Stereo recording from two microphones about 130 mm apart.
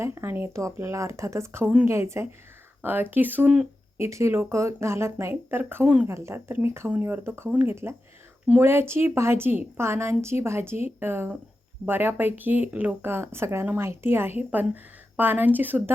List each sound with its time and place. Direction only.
0.0 s speech: 20° right (ahead or behind)
3.9 s speech: 20° right (ahead or behind)